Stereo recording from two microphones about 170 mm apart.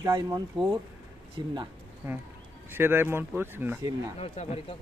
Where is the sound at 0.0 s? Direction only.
20° right (ahead or behind).